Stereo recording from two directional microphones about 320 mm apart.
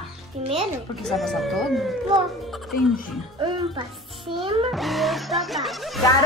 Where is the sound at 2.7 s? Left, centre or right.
Left.